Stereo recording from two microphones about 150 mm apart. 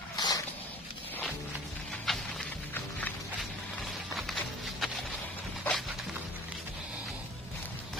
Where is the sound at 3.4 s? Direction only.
Centre (ahead or behind).